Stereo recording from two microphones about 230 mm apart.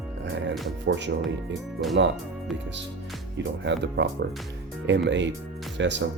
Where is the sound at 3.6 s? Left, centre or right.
Right.